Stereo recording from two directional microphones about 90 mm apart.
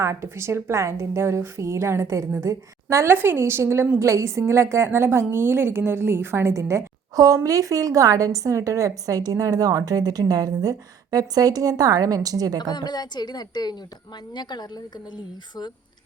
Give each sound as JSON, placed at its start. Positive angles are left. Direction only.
{"t": 0.0, "sound": "a woman's voice", "side_deg": -30}
{"t": 12.7, "sound": "a woman's voice", "side_deg": 50}